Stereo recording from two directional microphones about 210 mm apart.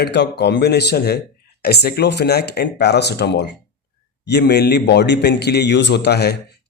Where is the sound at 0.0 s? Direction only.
55° left (ahead or behind).